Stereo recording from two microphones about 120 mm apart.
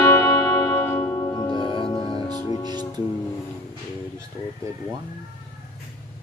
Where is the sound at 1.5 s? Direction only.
45° left (ahead or behind).